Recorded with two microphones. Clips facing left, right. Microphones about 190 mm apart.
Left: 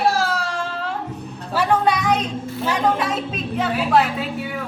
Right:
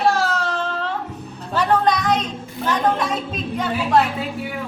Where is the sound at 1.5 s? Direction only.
10° left (ahead or behind).